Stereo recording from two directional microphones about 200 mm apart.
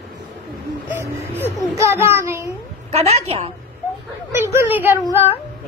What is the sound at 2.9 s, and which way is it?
Speech, 30° right (ahead or behind).